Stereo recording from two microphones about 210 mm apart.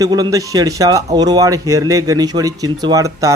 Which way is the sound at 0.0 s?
15° right (ahead or behind).